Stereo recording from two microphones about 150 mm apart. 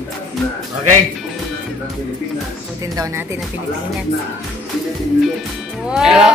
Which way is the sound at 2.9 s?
20° right (ahead or behind).